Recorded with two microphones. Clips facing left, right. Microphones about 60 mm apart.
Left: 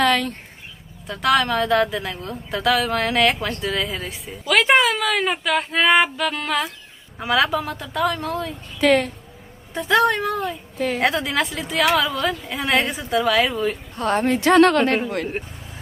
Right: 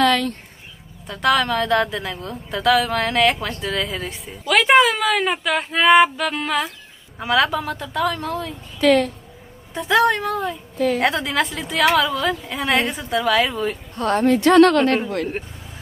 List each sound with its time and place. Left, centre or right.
0.0 s a sound: centre
1.0 s speech: centre
8.8 s speech: centre
9.8 s speech: centre
14.0 s speech: centre
14.8 s speech: centre